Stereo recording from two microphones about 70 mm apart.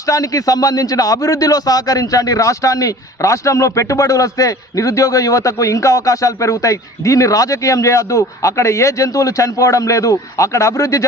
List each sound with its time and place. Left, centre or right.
0.0 s a man's voice: left